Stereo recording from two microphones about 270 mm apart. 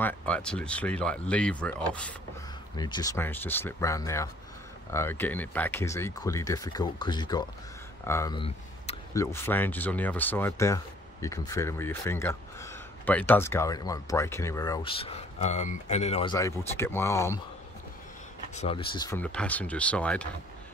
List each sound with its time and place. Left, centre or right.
0.0 s speech: centre
2.7 s speech: centre
8.1 s a sound: centre
9.2 s speech: centre
18.5 s speech: left; by 20.2 s centre